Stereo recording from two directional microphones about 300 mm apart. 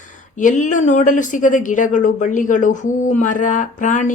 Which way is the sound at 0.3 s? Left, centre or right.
Left.